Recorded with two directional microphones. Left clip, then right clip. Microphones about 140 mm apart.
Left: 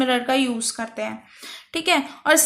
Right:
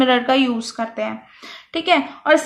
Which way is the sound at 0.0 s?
Centre (ahead or behind).